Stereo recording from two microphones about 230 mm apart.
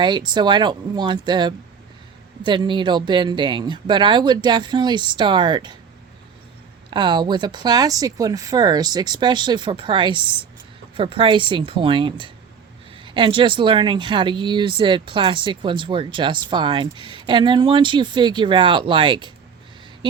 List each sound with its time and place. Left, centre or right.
0.0 s speech: centre
6.9 s speech: centre